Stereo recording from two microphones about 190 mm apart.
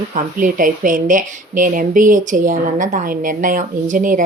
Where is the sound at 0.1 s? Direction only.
45° right (ahead or behind).